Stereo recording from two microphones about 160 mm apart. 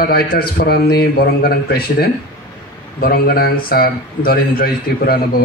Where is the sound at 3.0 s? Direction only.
70° left (ahead or behind).